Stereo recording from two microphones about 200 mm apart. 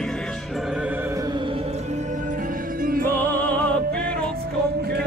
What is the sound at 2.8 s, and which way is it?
Music, 45° right (ahead or behind).